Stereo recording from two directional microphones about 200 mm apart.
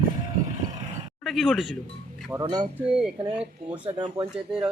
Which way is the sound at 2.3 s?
20° right (ahead or behind).